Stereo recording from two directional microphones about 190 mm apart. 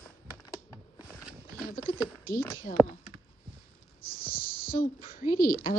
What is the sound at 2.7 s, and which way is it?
Speech, 45° left (ahead or behind).